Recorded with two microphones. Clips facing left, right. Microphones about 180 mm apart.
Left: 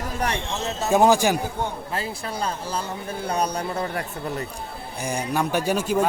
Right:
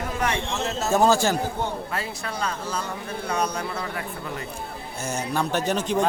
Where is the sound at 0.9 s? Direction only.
15° left (ahead or behind).